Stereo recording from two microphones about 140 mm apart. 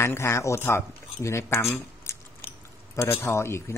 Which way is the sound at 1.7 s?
20° left (ahead or behind).